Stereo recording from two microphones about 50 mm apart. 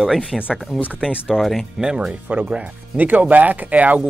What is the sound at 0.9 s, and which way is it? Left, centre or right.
Speech, centre.